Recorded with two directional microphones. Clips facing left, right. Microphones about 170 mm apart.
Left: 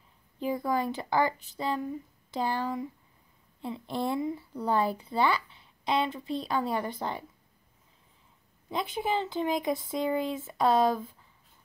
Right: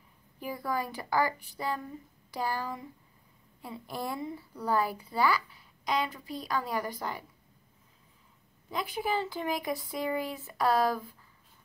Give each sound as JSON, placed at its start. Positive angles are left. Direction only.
{"t": 0.4, "sound": "a woman's voice", "side_deg": 20}
{"t": 8.6, "sound": "a woman's voice", "side_deg": 25}